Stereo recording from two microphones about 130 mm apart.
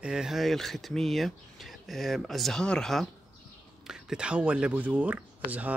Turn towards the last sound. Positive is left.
turn(degrees=-10)  # may be behind; listen again after turning